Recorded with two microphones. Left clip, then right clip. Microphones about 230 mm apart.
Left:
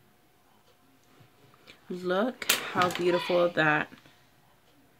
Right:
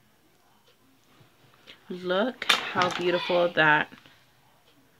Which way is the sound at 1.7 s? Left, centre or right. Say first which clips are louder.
Right 1 dB; centre.